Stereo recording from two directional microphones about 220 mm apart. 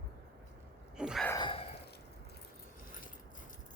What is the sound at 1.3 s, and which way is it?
Gasp, 20° left (ahead or behind).